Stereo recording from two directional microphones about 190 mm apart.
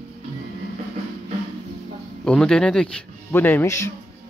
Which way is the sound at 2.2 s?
5° left (ahead or behind).